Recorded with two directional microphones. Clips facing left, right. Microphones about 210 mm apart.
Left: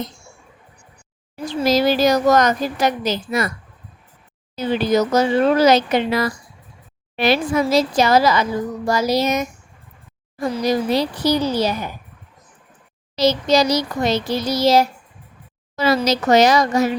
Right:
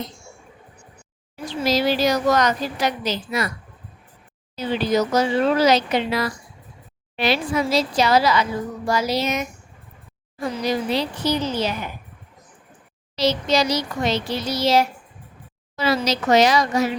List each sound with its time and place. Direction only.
1.6 s a woman's voice: 45° left (ahead or behind)
4.5 s a woman's voice: 45° left (ahead or behind)
8.9 s child singing: 45° left (ahead or behind)
13.1 s child singing: 40° left (ahead or behind)
15.7 s a woman's voice: 45° left (ahead or behind)